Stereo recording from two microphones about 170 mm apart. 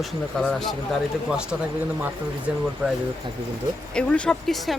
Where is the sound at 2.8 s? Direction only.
5° right (ahead or behind).